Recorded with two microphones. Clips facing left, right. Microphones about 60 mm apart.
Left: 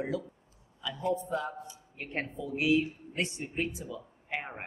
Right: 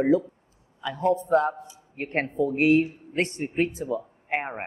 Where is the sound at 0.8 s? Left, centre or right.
Right.